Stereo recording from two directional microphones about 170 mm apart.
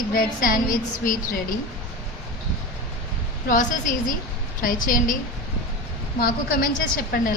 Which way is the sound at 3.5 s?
50° left (ahead or behind).